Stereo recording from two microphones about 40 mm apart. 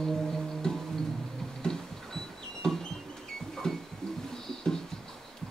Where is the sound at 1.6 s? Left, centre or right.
Centre.